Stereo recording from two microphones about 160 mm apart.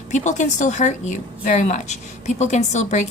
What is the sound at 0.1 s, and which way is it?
A woman's voice, 50° left (ahead or behind).